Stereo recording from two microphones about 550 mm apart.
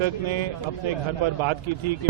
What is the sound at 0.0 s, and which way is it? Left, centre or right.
Speech, right.